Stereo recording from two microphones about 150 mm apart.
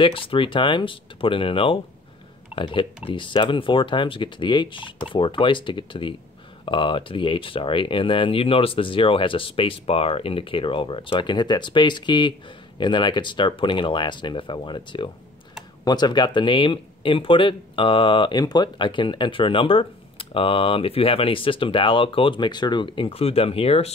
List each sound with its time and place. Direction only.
0.0 s speech: 35° left (ahead or behind)